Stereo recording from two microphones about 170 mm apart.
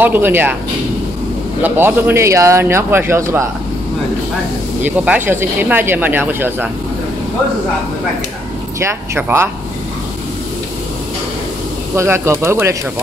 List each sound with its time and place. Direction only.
0.0 s a man's voice: 10° right (ahead or behind)
1.6 s a man's voice: 10° right (ahead or behind)
4.8 s a man's voice: 10° right (ahead or behind)
8.7 s a man's voice: 15° right (ahead or behind)
11.9 s a man's voice: 15° right (ahead or behind)